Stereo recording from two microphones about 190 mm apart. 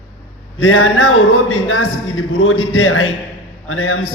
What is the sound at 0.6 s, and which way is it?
A man's voice, 90° left.